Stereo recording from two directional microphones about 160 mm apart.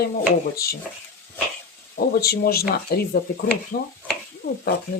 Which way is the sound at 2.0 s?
75° left (ahead or behind).